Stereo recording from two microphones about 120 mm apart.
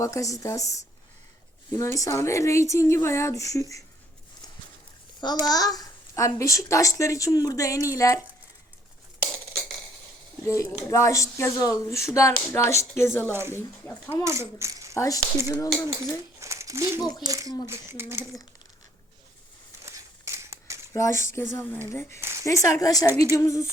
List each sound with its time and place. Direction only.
0.0 s a child's voice: 25° left (ahead or behind)
5.2 s a child's voice: 35° left (ahead or behind)
10.4 s a child's voice: 25° left (ahead or behind)
13.3 s speech: 20° right (ahead or behind)
13.8 s a child's voice: 20° left (ahead or behind)
14.3 s a child's voice: 25° right (ahead or behind)
14.9 s a child's voice: 30° left (ahead or behind)
16.4 s a sound: 25° right (ahead or behind)
17.2 s speech: 30° right (ahead or behind)
19.8 s a sound: 25° right (ahead or behind)
20.9 s a child's voice: 25° left (ahead or behind)
22.2 s speech: 20° right (ahead or behind)
22.7 s a child's voice: 30° left (ahead or behind)